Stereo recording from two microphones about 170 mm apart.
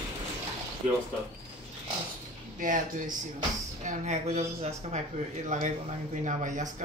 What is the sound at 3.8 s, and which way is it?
Speech, 40° right (ahead or behind).